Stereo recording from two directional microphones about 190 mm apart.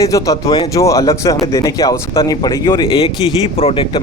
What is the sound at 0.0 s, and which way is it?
Speech, 15° left (ahead or behind).